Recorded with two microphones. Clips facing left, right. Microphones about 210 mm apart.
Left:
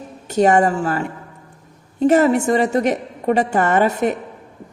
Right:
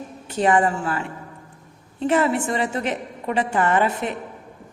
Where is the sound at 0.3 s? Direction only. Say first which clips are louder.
Left 5 dB; 45° left (ahead or behind).